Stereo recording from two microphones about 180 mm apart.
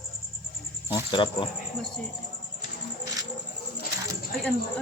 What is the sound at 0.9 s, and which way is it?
Speech, 25° left (ahead or behind).